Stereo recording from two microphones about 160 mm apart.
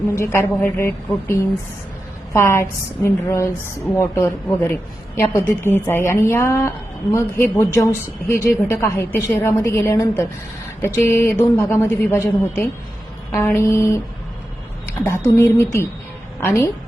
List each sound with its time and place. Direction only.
0.2 s a woman's voice: 15° left (ahead or behind)
15.0 s a woman's voice: 15° left (ahead or behind)